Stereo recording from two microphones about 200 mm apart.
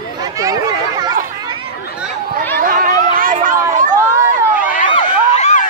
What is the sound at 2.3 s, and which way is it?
Chatter, 45° right (ahead or behind).